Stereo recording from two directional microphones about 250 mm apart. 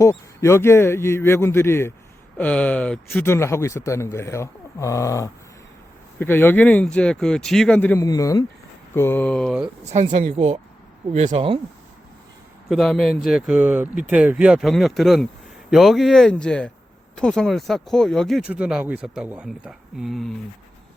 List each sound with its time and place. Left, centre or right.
0.0 s a man's voice: centre
9.9 s speech: right
12.6 s speech: centre